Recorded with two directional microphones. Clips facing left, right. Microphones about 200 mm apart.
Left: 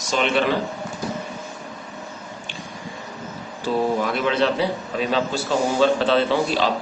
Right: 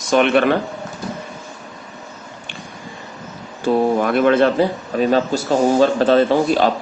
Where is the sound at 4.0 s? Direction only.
55° right (ahead or behind).